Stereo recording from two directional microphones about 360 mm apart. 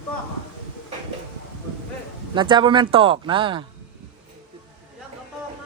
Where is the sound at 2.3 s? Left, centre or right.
Centre.